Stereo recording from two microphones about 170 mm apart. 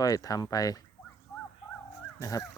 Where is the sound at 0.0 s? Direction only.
20° left (ahead or behind).